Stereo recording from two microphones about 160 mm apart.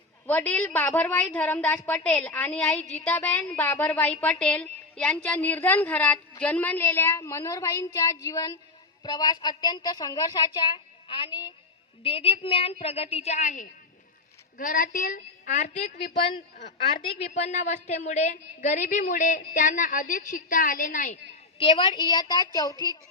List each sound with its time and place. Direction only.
0.3 s a woman's voice: 10° left (ahead or behind); by 11.5 s 25° left (ahead or behind)
12.0 s a woman's voice: 35° left (ahead or behind); by 21.2 s 55° left (ahead or behind)
21.6 s a woman's voice: 30° left (ahead or behind)